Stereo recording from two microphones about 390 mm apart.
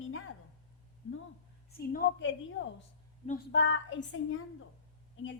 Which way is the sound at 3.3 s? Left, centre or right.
Left.